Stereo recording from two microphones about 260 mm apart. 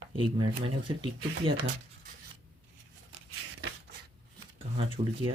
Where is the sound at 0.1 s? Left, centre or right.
Centre.